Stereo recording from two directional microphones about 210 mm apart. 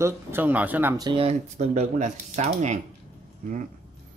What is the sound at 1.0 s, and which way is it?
Speech, 25° right (ahead or behind).